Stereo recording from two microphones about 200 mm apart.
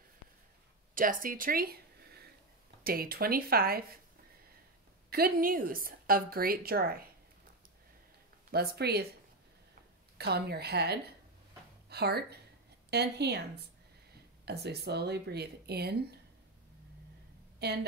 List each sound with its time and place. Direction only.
0.9 s a woman's voice: 45° right (ahead or behind)
5.1 s a woman's voice: 45° right (ahead or behind)
8.5 s a woman's voice: 50° right (ahead or behind)
10.1 s a woman's voice: 55° right (ahead or behind)
17.6 s speech: 55° right (ahead or behind)